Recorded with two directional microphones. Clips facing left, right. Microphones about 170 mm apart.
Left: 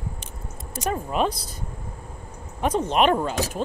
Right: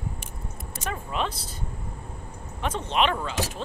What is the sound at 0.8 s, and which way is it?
Speech, 40° left (ahead or behind).